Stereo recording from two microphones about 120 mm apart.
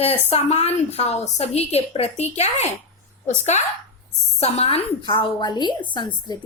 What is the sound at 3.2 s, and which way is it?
Speech, 85° left.